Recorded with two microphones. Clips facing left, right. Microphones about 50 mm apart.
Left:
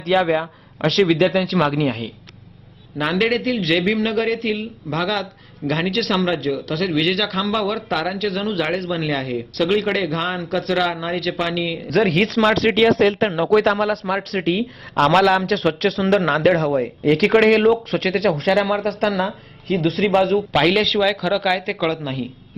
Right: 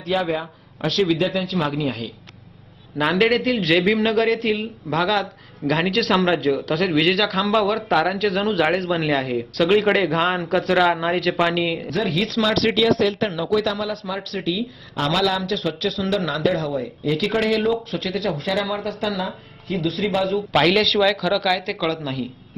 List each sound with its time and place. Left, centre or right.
0.0 s a man's voice: left
0.3 s a man's voice: left
3.0 s a man's voice: centre
11.9 s speech: left
14.6 s speech: left
15.1 s speech: left
20.6 s a man's voice: centre